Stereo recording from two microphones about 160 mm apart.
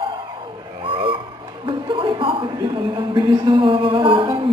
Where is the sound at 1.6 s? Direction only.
30° right (ahead or behind).